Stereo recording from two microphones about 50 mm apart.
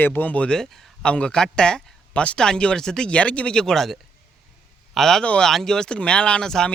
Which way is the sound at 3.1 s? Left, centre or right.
Left.